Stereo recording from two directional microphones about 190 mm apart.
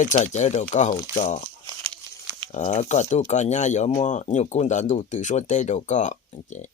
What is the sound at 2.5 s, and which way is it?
Speech, 40° left (ahead or behind).